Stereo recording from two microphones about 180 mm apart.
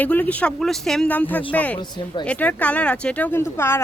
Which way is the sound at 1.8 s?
25° left (ahead or behind).